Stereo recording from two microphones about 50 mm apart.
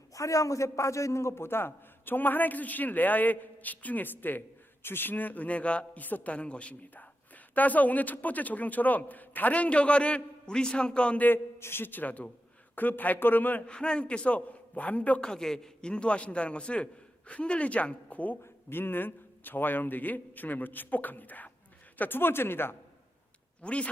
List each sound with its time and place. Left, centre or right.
0.1 s a man's voice: left
11.6 s a man's voice: left
13.7 s a man's voice: centre
15.2 s a man's voice: centre; by 18.3 s left
18.7 s a man's voice: left
23.6 s a man's voice: left